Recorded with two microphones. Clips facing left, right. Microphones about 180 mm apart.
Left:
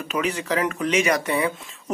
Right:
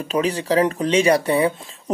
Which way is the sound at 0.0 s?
35° right (ahead or behind).